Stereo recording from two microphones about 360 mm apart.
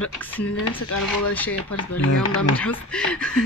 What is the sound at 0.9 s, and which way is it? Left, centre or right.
Speech, left.